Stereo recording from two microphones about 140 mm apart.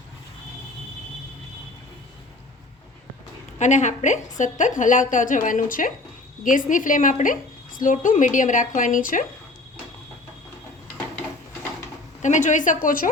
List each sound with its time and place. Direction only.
3.6 s a woman's voice: 60° left (ahead or behind); by 9.2 s 75° left (ahead or behind)
12.2 s a woman's voice: 60° left (ahead or behind); by 13.1 s 80° left